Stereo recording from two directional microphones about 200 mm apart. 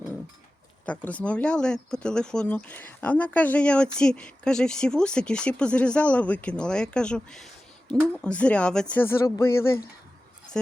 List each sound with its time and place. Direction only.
0.9 s speech: 5° left (ahead or behind)